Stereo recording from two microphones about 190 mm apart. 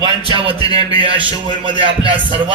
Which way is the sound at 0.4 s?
25° right (ahead or behind).